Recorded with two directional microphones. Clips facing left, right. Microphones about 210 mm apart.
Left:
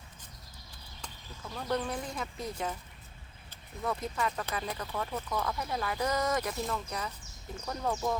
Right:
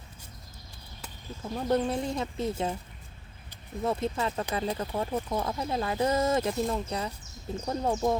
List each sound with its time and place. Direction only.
1.4 s speech: 25° right (ahead or behind)
3.8 s speech: 25° right (ahead or behind)